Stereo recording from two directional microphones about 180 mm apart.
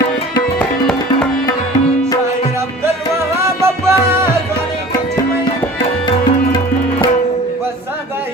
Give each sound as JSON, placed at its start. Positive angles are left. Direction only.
{"t": 3.4, "sound": "music", "side_deg": -15}